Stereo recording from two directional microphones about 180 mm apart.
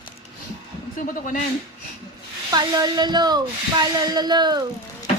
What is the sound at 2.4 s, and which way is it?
Speech, 20° right (ahead or behind).